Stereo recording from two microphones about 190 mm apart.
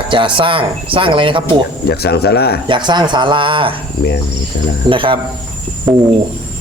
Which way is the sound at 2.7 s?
25° right (ahead or behind).